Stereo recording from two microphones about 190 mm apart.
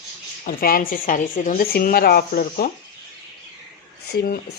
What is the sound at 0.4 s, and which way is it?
Speech, 45° left (ahead or behind).